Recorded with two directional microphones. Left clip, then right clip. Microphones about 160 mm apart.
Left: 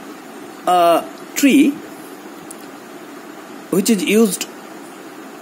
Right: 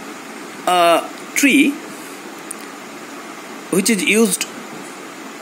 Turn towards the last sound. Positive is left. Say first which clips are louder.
# even
turn(degrees=20)  # may be behind; listen again after turning